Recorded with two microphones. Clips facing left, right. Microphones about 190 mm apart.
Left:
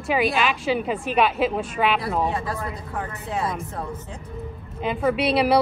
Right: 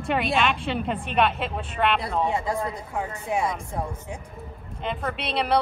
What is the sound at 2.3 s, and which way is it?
Speech, 15° right (ahead or behind).